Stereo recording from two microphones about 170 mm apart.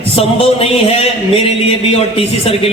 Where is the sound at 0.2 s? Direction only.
35° left (ahead or behind).